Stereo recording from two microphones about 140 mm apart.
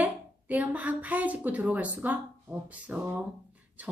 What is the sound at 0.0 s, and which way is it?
A woman's voice, 10° right (ahead or behind).